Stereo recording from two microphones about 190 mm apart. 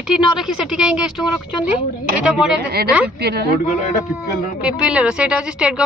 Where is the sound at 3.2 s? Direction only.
55° right (ahead or behind).